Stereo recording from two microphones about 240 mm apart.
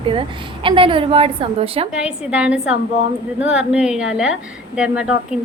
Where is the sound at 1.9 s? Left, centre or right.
Centre.